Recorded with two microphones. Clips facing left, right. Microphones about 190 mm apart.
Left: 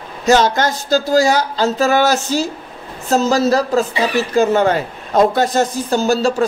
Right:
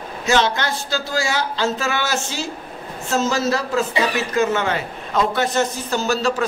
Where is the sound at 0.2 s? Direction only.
40° left (ahead or behind).